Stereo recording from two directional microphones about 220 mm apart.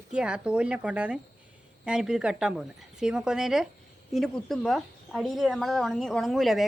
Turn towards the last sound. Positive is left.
turn(degrees=0)  # may be behind; listen again after turning